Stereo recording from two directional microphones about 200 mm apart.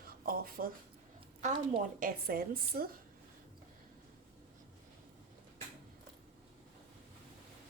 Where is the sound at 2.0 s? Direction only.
45° right (ahead or behind).